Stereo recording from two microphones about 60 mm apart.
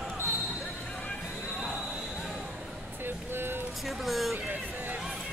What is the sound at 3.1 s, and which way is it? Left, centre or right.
Vehicle, right.